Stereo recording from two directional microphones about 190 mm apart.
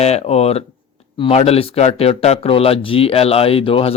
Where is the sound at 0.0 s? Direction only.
35° left (ahead or behind).